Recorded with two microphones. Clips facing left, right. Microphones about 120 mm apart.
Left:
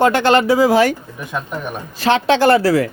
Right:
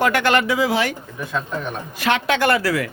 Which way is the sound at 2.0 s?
30° left (ahead or behind).